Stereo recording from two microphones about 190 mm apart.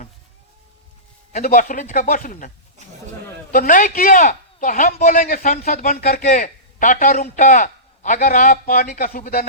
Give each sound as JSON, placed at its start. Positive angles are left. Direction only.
{"t": 1.5, "sound": "a man's voice", "side_deg": 45}
{"t": 3.5, "sound": "a man's voice", "side_deg": 45}